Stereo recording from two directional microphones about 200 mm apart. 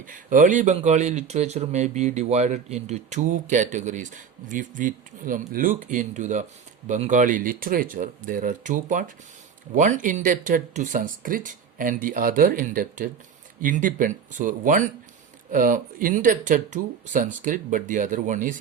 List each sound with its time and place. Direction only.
0.0 s speech: 40° right (ahead or behind)